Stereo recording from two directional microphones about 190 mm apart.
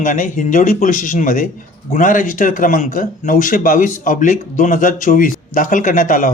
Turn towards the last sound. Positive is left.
turn(degrees=45)  # may be behind; listen again after turning